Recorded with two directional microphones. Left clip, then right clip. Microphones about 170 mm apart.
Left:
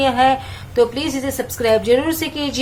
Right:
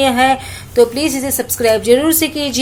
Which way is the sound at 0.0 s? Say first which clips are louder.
Right 2 dB; 35° right (ahead or behind).